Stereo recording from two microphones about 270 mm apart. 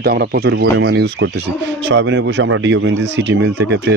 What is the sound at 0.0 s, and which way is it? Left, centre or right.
Speech, right.